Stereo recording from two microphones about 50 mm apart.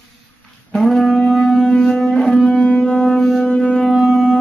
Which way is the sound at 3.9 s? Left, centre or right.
Centre.